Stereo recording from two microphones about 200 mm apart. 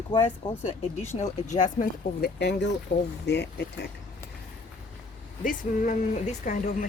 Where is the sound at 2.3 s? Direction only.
60° left (ahead or behind).